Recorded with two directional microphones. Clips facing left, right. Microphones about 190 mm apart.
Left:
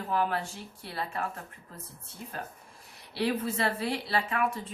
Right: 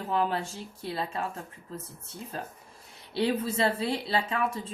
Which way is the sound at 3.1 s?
30° right (ahead or behind).